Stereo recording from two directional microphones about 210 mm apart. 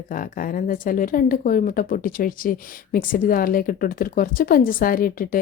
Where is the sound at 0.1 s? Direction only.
40° left (ahead or behind).